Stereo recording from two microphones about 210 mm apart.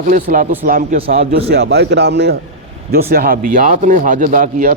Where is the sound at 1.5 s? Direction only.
50° right (ahead or behind).